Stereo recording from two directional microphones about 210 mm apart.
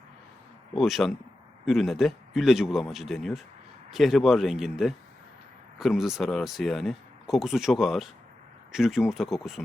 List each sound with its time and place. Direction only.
0.8 s speech: centre (ahead or behind)